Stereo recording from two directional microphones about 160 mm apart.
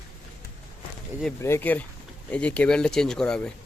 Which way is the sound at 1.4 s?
15° left (ahead or behind).